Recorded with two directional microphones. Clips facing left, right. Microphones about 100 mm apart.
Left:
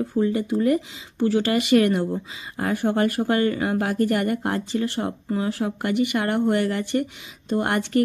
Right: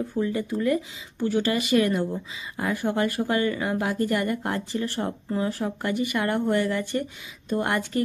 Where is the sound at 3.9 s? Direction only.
30° right (ahead or behind).